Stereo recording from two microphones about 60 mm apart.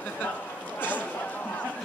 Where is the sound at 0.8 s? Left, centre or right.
Left.